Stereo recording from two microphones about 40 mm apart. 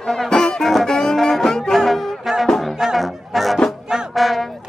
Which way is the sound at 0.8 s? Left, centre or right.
Centre.